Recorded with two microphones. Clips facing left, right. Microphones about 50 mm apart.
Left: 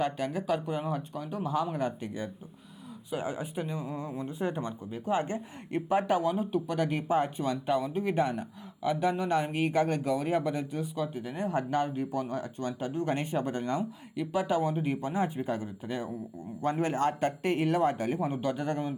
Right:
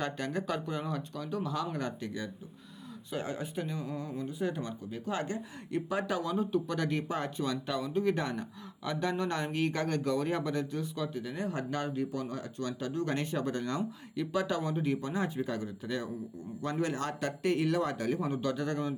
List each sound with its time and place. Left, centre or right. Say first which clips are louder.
0.0 s speech: left 3 dB; centre
3.1 s speech: left 2 dB; centre; by 6.3 s left
6.3 s speech: left 1 dB; centre